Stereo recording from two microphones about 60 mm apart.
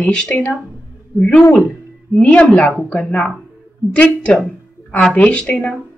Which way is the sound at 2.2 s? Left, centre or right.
Left.